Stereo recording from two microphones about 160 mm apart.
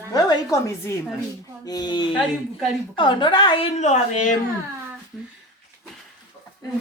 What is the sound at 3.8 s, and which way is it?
Speech, 45° left (ahead or behind).